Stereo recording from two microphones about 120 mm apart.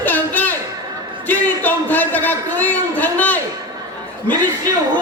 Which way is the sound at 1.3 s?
15° left (ahead or behind).